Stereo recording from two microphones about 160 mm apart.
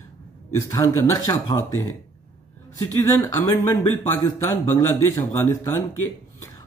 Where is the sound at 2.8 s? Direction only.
20° left (ahead or behind).